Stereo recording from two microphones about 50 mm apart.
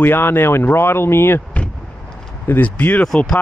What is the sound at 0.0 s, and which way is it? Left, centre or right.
Speech, left.